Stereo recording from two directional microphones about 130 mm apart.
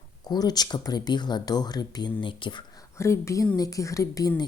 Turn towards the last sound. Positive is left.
turn(degrees=25)  # may be behind; listen again after turning